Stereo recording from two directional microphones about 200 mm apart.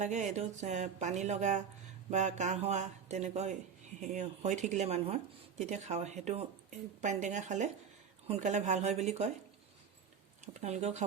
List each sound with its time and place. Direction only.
0.0 s speech: 35° right (ahead or behind)
10.4 s speech: 35° right (ahead or behind)